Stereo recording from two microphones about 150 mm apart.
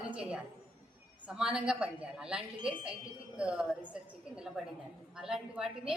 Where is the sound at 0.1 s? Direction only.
5° right (ahead or behind).